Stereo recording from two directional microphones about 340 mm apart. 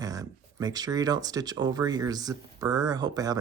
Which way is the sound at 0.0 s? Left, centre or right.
Centre.